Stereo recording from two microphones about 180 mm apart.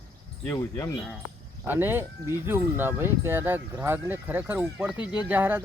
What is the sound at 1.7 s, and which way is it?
Speech, 10° right (ahead or behind).